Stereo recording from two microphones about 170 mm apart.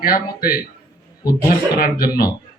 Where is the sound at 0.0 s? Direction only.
60° left (ahead or behind).